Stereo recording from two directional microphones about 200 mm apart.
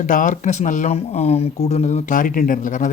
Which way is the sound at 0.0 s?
40° left (ahead or behind).